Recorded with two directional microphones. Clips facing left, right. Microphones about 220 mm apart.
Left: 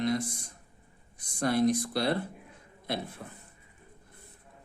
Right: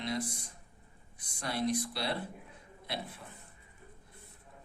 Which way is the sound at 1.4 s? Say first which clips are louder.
Left 7 dB; 45° left (ahead or behind).